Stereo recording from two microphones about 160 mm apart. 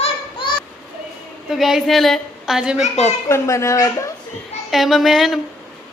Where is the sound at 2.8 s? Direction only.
45° left (ahead or behind).